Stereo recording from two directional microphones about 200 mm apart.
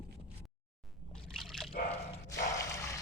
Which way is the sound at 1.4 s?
Centre (ahead or behind).